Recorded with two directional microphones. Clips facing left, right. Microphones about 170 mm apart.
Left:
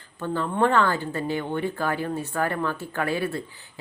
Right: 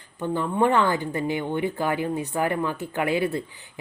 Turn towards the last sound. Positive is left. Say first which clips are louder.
# right 3 dB
turn(degrees=-20)  # may be behind; listen again after turning